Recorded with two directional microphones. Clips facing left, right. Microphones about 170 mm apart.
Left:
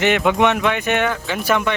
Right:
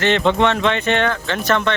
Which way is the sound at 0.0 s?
10° left (ahead or behind).